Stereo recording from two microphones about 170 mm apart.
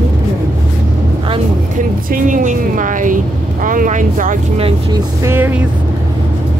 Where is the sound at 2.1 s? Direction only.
50° right (ahead or behind).